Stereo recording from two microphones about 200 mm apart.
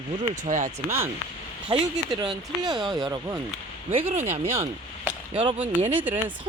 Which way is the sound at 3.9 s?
35° right (ahead or behind).